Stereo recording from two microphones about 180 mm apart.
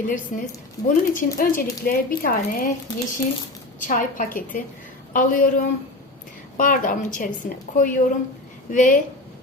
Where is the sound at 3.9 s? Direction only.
45° left (ahead or behind).